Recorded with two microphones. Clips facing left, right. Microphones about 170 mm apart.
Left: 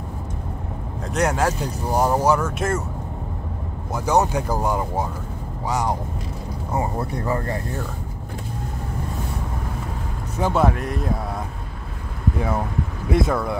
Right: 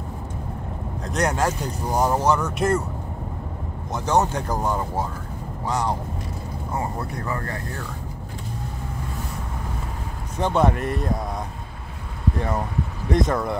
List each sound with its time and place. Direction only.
1.0 s speech: 5° left (ahead or behind)
3.9 s speech: 10° left (ahead or behind)
6.7 s speech: 25° left (ahead or behind)
10.4 s speech: 5° left (ahead or behind)
12.4 s speech: 5° left (ahead or behind)